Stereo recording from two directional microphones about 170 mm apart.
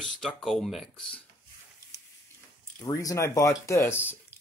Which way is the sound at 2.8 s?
20° left (ahead or behind).